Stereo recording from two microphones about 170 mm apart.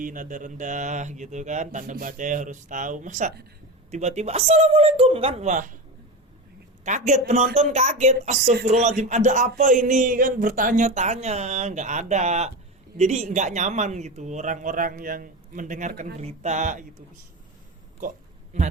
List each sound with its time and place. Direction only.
0.0 s a woman's voice: 50° right (ahead or behind)
6.8 s a woman's voice: 45° right (ahead or behind)
18.0 s speech: 55° right (ahead or behind)